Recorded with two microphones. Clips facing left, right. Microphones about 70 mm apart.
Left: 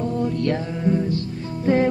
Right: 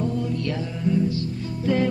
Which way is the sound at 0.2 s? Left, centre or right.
Left.